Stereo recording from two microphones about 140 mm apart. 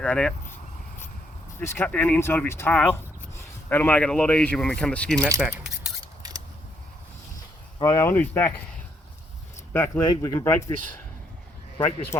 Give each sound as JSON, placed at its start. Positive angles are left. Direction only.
{"t": 0.0, "sound": "speech", "side_deg": 5}
{"t": 1.5, "sound": "speech", "side_deg": 15}
{"t": 5.4, "sound": "keys jangling", "side_deg": -5}
{"t": 6.2, "sound": "mechanisms", "side_deg": -25}
{"t": 7.8, "sound": "speech", "side_deg": 25}
{"t": 9.7, "sound": "speech", "side_deg": 15}
{"t": 10.0, "sound": "speech", "side_deg": 30}